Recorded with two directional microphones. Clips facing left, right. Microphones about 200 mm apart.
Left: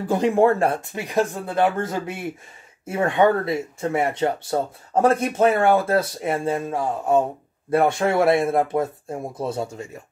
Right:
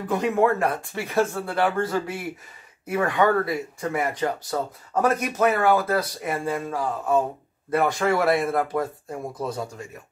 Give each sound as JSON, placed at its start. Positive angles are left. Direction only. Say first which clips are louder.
{"t": 0.0, "sound": "speech", "louder": "left 4 dB", "side_deg": 30}